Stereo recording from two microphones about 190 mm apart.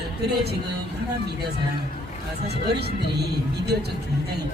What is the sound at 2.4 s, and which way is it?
Speech, 60° right (ahead or behind).